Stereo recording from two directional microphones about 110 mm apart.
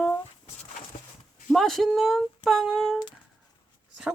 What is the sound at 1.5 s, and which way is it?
Speech, centre (ahead or behind).